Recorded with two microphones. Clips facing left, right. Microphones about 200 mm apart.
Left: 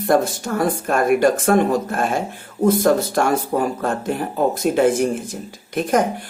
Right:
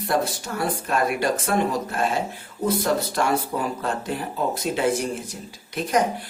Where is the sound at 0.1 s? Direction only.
50° left (ahead or behind).